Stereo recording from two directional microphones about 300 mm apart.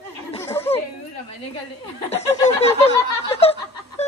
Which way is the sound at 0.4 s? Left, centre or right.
Centre.